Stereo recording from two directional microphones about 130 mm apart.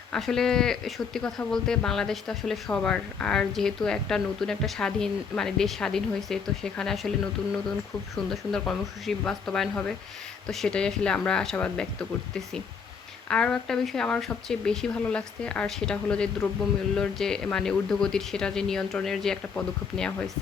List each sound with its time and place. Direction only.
0.1 s speech: 5° left (ahead or behind)
8.1 s speech: centre (ahead or behind)
13.3 s speech: 5° left (ahead or behind)